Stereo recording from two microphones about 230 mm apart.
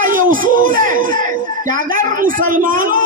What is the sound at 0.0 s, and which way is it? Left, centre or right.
A man's voice, right.